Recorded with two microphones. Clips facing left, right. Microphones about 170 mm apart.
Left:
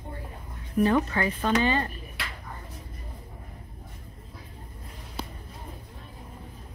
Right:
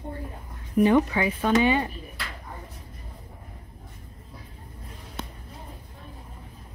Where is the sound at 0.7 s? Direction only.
15° right (ahead or behind).